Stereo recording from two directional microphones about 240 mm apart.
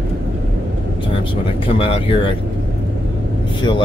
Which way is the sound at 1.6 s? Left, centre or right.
Left.